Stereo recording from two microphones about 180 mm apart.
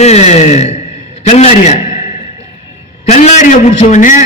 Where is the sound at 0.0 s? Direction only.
40° left (ahead or behind).